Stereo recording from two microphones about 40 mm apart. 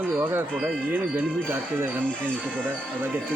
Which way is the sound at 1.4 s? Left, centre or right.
Right.